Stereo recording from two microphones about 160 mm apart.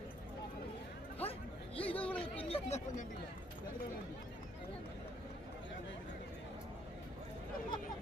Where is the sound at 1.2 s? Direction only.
35° left (ahead or behind).